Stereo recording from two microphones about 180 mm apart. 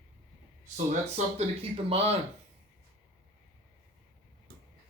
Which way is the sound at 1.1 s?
35° right (ahead or behind).